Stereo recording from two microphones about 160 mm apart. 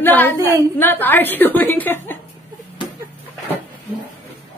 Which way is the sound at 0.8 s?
10° left (ahead or behind).